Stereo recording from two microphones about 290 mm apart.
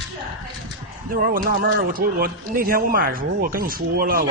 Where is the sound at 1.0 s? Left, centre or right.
Right.